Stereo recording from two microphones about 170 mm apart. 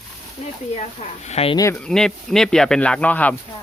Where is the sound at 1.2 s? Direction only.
40° left (ahead or behind).